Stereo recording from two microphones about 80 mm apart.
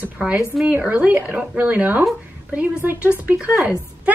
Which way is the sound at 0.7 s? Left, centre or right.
Centre.